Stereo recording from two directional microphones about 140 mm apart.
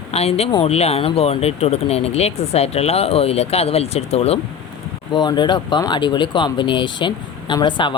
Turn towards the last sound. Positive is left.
turn(degrees=35)  # may be behind; listen again after turning